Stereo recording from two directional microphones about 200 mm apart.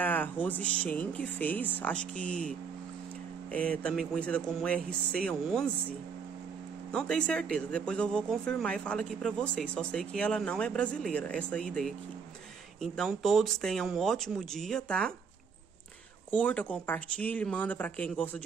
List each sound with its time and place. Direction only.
0.0 s speech: 10° left (ahead or behind)
3.5 s speech: 5° left (ahead or behind)
6.9 s speech: 5° left (ahead or behind)
16.3 s speech: 5° left (ahead or behind)